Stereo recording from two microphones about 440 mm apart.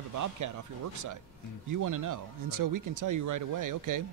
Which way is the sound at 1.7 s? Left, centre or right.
Right.